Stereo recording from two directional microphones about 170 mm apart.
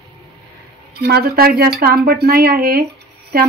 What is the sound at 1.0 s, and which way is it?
Speech, 65° right (ahead or behind).